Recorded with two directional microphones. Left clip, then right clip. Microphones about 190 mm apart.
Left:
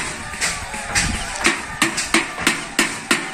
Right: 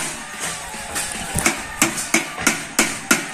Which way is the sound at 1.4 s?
55° right (ahead or behind).